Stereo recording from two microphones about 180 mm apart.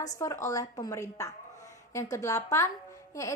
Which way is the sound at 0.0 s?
20° left (ahead or behind).